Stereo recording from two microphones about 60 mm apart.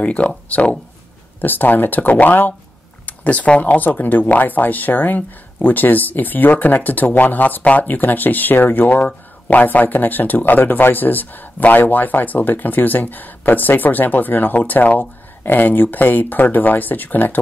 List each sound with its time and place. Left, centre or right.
0.0 s speech: left